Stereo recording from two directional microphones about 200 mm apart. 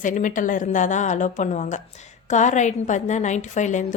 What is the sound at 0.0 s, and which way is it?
Speech, 40° left (ahead or behind).